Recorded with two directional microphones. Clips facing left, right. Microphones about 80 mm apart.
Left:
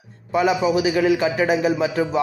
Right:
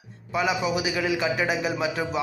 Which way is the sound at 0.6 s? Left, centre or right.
Left.